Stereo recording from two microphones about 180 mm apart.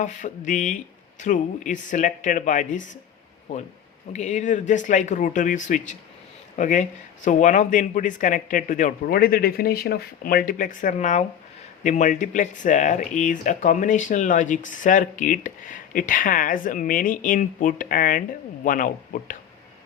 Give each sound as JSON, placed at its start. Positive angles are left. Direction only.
{"t": 0.0, "sound": "speech", "side_deg": 45}
{"t": 4.1, "sound": "speech", "side_deg": 40}